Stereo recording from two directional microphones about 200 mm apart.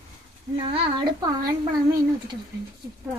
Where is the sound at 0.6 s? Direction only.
25° right (ahead or behind).